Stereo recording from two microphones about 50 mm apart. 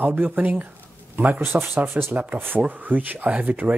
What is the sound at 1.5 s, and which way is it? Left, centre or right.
Speech, right.